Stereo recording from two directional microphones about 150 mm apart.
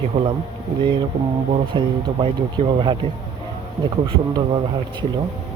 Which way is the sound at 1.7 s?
35° right (ahead or behind).